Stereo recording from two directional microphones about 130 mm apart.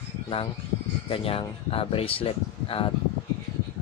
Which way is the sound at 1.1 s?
45° left (ahead or behind).